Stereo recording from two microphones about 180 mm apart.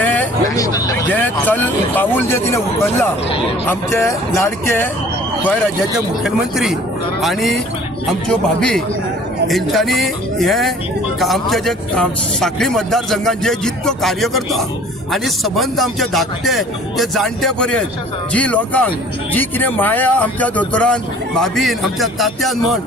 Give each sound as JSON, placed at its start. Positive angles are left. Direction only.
{"t": 0.0, "sound": "hubbub", "side_deg": 10}
{"t": 0.6, "sound": "speech", "side_deg": 20}
{"t": 6.2, "sound": "a man's voice", "side_deg": -5}